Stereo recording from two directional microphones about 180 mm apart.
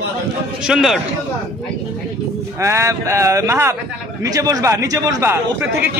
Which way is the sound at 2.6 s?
15° right (ahead or behind).